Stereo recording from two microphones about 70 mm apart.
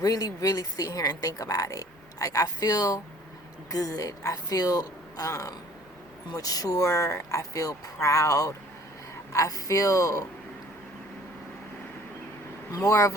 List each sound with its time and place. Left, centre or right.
0.0 s speech: left
12.7 s speech: left